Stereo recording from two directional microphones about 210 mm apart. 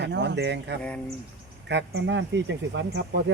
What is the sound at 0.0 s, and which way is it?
Speech, 55° right (ahead or behind).